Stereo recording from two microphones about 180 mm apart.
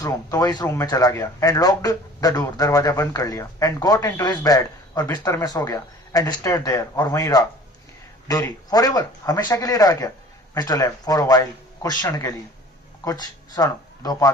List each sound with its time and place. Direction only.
0.0 s speech: 20° left (ahead or behind)